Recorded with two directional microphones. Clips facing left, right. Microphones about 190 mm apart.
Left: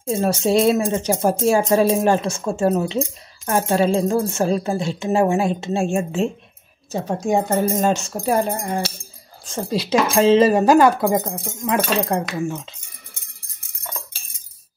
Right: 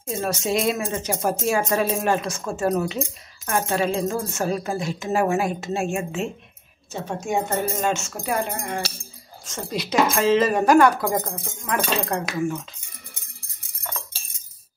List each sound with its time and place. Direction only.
0.1 s speech: 30° left (ahead or behind)